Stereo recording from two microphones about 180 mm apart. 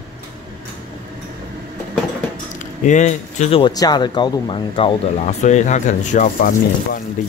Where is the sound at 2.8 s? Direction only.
40° left (ahead or behind).